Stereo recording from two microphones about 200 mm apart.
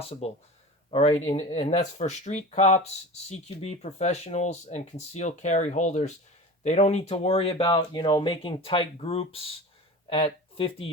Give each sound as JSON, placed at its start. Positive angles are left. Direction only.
{"t": 0.1, "sound": "speech", "side_deg": 30}
{"t": 1.1, "sound": "speech", "side_deg": 20}
{"t": 1.5, "sound": "speech", "side_deg": 30}